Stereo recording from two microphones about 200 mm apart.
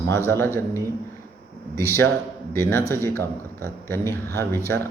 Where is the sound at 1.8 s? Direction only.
10° left (ahead or behind).